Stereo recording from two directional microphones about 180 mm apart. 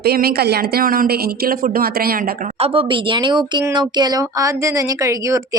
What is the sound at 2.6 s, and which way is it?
Speech, 30° right (ahead or behind).